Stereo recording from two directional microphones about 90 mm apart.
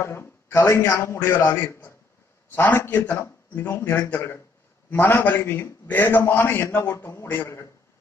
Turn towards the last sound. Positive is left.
turn(degrees=30)  # may be behind; listen again after turning